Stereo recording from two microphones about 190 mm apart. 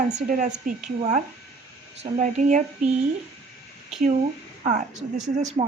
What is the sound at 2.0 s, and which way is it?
Speech, 40° right (ahead or behind).